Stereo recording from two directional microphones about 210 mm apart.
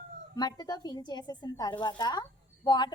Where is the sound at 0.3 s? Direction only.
20° left (ahead or behind).